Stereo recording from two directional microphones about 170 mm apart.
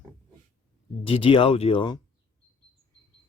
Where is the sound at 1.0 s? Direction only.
35° left (ahead or behind).